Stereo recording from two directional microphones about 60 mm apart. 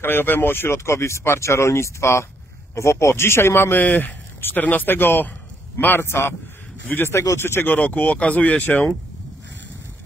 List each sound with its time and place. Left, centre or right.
0.0 s speech: left
3.8 s speech: left
6.9 s speech: left
7.3 s speech: left
7.8 s speech: left